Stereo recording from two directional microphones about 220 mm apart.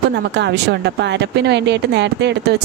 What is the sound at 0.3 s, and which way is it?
Speech, 50° right (ahead or behind).